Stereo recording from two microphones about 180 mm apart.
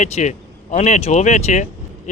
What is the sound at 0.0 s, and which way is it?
Speech, 40° left (ahead or behind).